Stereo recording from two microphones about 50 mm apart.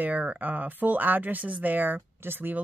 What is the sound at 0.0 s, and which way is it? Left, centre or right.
Speech, right.